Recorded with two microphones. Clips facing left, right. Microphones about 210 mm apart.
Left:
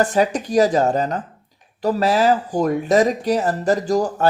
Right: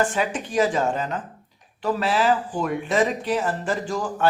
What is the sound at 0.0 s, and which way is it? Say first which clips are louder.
Speech: left 6 dB; 40° left (ahead or behind).